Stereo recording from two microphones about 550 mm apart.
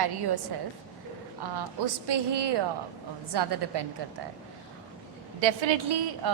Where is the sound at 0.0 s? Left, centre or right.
Right.